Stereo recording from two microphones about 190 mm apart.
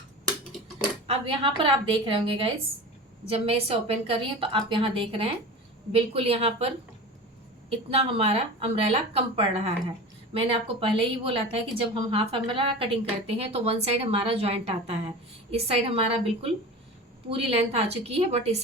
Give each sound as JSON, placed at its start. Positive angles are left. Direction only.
{"t": 1.0, "sound": "a woman's voice", "side_deg": -30}